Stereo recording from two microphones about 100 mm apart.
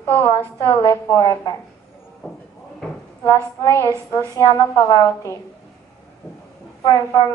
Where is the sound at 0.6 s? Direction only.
35° left (ahead or behind).